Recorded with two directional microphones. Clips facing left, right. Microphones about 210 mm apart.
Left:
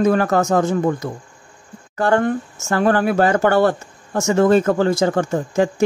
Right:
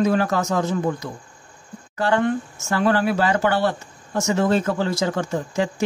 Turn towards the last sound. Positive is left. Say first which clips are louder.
# left 5 dB
turn(degrees=50)  # may be behind; listen again after turning